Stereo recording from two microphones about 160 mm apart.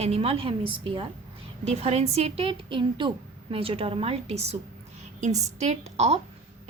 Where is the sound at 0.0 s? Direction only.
40° right (ahead or behind).